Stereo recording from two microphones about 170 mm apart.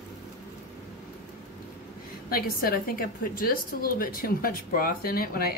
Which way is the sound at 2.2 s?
60° left (ahead or behind).